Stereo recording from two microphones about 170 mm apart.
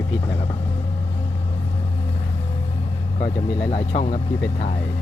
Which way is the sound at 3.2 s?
45° left (ahead or behind).